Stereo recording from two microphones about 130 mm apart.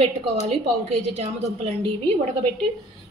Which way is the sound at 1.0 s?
55° right (ahead or behind).